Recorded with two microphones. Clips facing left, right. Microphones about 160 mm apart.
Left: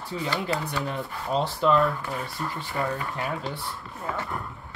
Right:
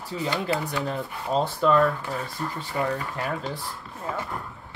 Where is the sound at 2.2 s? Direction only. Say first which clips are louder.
Right 1 dB; 20° right (ahead or behind).